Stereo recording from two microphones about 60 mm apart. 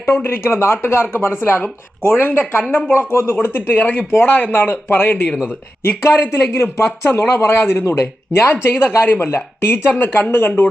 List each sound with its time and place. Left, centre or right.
0.0 s speech: left
5.8 s speech: left